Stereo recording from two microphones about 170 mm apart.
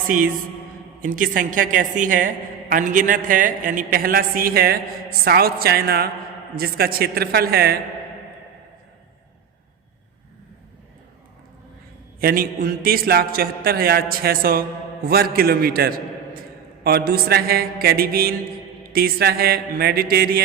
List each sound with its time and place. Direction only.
1.0 s a woman's voice: 50° right (ahead or behind)
12.2 s a man's voice: 60° right (ahead or behind)